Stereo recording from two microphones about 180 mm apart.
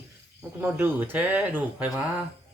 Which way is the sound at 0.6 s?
10° right (ahead or behind).